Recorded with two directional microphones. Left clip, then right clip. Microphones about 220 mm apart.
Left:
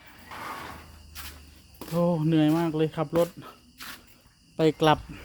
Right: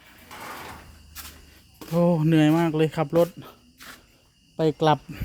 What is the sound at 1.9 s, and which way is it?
Speech, 35° right (ahead or behind).